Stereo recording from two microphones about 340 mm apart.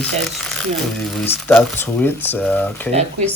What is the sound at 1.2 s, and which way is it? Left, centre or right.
Speech, centre.